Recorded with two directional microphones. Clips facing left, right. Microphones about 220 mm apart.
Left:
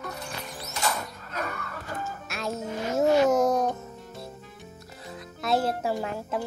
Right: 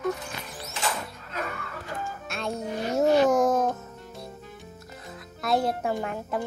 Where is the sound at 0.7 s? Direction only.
40° left (ahead or behind).